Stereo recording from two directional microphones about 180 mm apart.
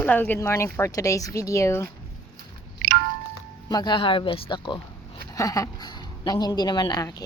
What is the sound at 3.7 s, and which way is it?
A woman's voice, 25° left (ahead or behind).